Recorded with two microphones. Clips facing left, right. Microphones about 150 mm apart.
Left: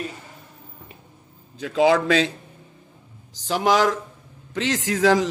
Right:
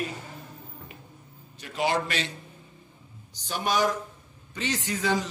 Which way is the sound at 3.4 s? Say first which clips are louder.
Left 7 dB; 90° left.